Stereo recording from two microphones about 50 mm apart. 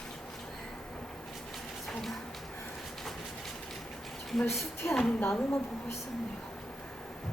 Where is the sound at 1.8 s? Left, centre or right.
Centre.